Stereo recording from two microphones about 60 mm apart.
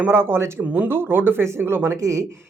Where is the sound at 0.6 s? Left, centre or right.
Right.